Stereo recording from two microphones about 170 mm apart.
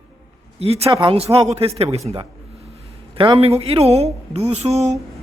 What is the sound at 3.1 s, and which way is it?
Speech, 30° right (ahead or behind).